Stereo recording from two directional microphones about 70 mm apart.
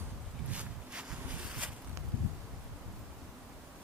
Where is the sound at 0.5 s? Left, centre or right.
Centre.